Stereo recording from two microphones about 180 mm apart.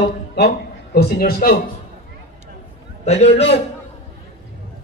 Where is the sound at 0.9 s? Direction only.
60° left (ahead or behind).